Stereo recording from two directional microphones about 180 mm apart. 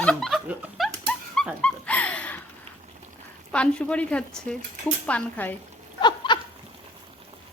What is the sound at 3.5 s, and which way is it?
Speech, 5° left (ahead or behind).